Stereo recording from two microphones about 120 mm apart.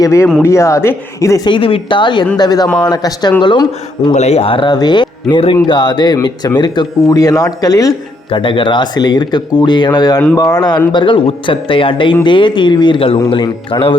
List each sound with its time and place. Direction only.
0.0 s speech: 25° left (ahead or behind)
1.5 s speech: 45° left (ahead or behind)
4.1 s speech: 65° left (ahead or behind); by 7.9 s 30° left (ahead or behind)
8.3 s speech: 45° left (ahead or behind)